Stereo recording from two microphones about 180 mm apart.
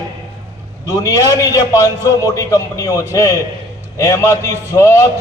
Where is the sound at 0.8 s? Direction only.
15° left (ahead or behind).